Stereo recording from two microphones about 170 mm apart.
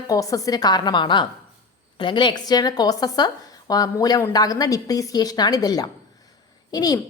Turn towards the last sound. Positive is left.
turn(degrees=20)  # may be behind; listen again after turning